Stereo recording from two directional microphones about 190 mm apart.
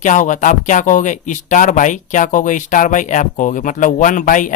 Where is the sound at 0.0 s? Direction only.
40° left (ahead or behind).